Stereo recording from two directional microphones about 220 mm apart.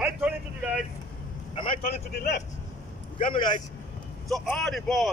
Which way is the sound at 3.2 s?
20° left (ahead or behind).